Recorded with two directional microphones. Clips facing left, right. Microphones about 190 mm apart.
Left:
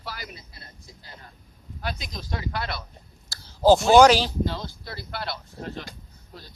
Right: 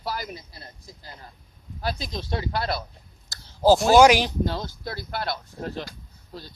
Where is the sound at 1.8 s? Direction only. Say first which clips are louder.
Right 4 dB; 30° right (ahead or behind).